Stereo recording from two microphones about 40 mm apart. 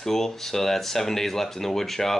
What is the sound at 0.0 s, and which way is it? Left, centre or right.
Speech, centre.